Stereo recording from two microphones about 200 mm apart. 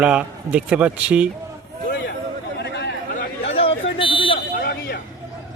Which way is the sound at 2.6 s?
60° left (ahead or behind).